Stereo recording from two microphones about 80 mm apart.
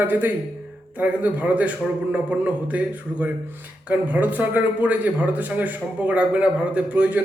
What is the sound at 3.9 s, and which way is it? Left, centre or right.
A man's voice, right.